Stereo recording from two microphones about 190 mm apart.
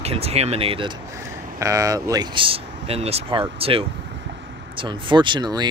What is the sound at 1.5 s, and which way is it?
Speech, 15° right (ahead or behind).